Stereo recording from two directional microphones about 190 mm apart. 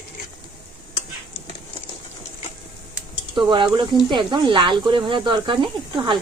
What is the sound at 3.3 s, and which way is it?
Speech, 25° right (ahead or behind).